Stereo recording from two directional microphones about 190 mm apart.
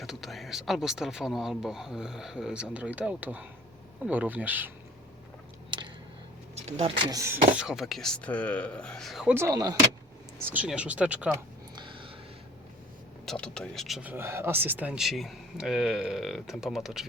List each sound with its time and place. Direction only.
0.0 s speech: centre (ahead or behind)
5.7 s a sound: 25° right (ahead or behind)
6.6 s speech: 35° right (ahead or behind); by 7.3 s 20° right (ahead or behind)
7.5 s speech: 5° right (ahead or behind); by 9.7 s 20° right (ahead or behind)
10.4 s speech: 10° right (ahead or behind)
11.7 s a sound: 25° right (ahead or behind)
13.2 s speech: 5° left (ahead or behind)